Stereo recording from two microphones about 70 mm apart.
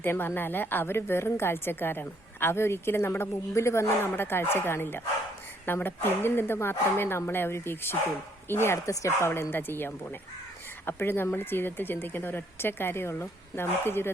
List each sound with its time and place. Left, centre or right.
0.0 s a woman's voice: left